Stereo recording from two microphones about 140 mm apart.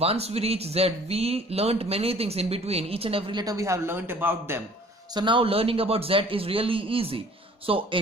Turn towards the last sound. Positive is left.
turn(degrees=-40)  # may be behind; listen again after turning